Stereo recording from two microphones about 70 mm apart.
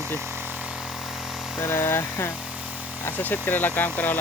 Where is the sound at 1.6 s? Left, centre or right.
Left.